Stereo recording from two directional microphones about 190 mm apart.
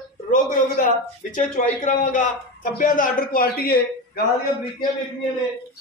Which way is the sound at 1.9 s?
45° left (ahead or behind).